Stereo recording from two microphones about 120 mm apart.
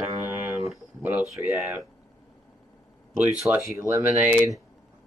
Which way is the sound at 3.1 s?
15° right (ahead or behind).